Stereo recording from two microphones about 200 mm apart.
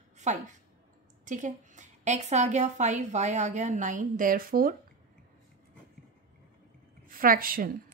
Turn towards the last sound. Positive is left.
turn(degrees=-45)  # may be behind; listen again after turning